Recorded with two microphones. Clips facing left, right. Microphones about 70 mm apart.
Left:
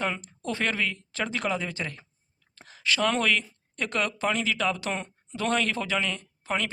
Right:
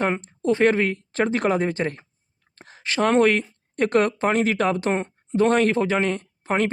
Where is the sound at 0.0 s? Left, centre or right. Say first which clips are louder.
Right 8 dB; right.